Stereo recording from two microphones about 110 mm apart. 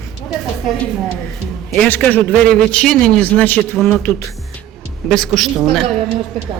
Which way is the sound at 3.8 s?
Centre (ahead or behind).